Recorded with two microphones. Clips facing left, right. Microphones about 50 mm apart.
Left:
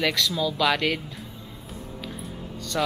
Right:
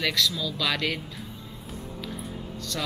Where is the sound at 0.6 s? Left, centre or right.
Centre.